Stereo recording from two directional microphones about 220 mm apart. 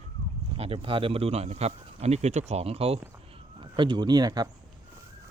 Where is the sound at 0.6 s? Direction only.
25° right (ahead or behind).